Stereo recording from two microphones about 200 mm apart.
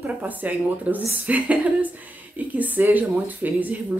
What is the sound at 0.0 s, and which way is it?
Speech, 10° right (ahead or behind).